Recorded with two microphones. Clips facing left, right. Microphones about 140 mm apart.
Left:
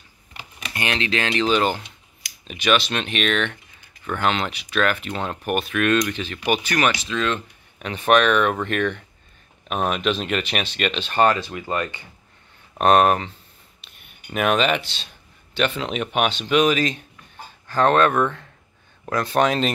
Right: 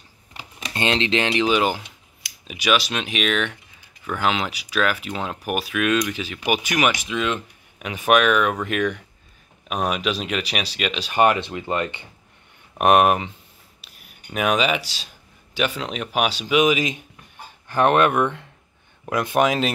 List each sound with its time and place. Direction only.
0.7 s speech: 25° right (ahead or behind); by 19.7 s 10° right (ahead or behind)